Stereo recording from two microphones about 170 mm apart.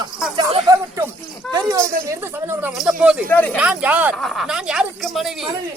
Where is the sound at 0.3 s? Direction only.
20° right (ahead or behind).